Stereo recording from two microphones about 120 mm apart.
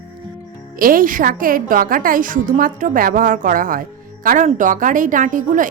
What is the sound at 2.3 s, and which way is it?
Speech, 90° right.